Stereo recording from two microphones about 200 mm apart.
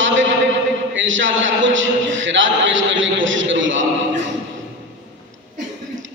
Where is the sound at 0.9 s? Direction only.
70° right (ahead or behind).